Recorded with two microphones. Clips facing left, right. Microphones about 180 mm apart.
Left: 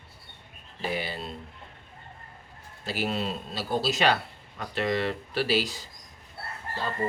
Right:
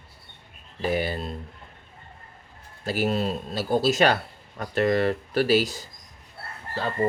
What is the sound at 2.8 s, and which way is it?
A man's voice, 45° right (ahead or behind).